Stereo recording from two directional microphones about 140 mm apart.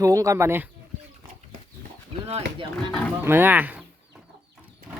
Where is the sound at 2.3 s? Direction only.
45° right (ahead or behind).